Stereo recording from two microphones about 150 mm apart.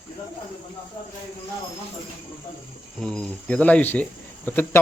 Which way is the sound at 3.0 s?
5° left (ahead or behind).